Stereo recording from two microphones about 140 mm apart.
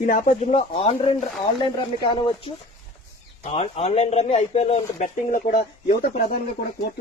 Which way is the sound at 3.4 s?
45° left (ahead or behind).